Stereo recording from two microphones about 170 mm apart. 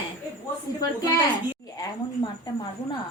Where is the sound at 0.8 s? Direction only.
20° left (ahead or behind).